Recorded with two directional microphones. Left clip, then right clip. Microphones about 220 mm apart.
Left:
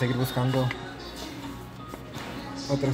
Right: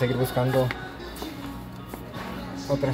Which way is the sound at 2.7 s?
15° left (ahead or behind).